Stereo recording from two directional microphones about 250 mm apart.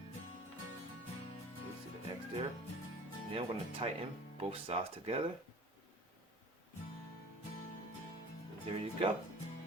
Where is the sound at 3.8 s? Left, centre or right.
Right.